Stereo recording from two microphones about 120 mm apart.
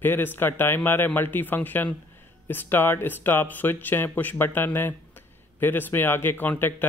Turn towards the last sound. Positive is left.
turn(degrees=15)  # may be behind; listen again after turning